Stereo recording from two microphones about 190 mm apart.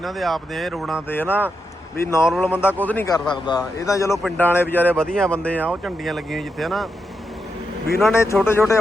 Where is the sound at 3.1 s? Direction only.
25° left (ahead or behind).